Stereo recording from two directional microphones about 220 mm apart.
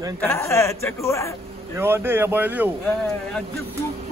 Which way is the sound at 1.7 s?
10° right (ahead or behind).